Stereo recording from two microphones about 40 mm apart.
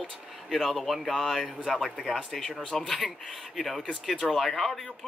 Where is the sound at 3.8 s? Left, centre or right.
Centre.